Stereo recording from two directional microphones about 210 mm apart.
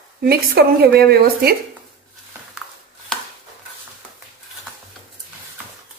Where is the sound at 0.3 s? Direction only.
50° right (ahead or behind).